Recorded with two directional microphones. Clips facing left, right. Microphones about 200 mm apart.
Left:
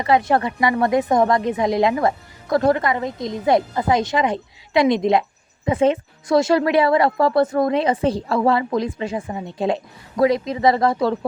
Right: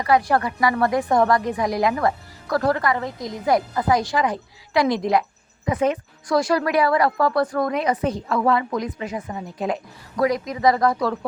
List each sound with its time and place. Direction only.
0.0 s speech: 25° left (ahead or behind)